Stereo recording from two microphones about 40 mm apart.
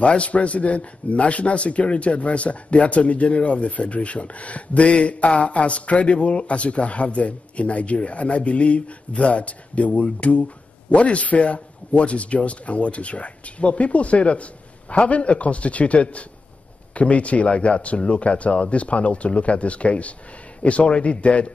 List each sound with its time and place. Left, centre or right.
0.0 s speech: left